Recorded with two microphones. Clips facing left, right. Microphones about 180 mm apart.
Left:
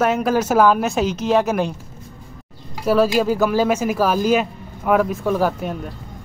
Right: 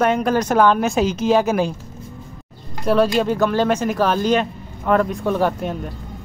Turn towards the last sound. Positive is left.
turn(degrees=0)  # may be behind; listen again after turning